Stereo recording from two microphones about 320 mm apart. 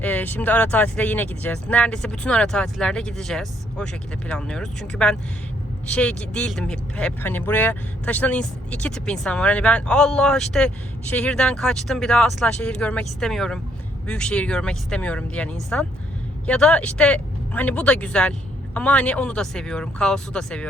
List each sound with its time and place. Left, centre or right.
0.0 s speech: centre